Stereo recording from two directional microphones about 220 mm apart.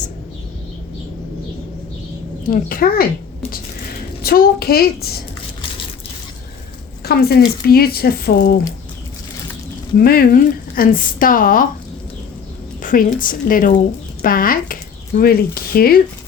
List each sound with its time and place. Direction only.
2.5 s speech: 40° left (ahead or behind)
4.2 s speech: 45° left (ahead or behind)
7.0 s speech: 45° left (ahead or behind)
10.0 s speech: 40° left (ahead or behind)
12.8 s speech: 35° left (ahead or behind)